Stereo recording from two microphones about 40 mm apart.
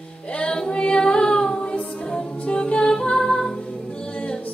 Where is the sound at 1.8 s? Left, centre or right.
Left.